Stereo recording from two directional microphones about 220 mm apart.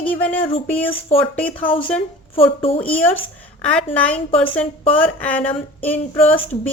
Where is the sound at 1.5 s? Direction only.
25° left (ahead or behind).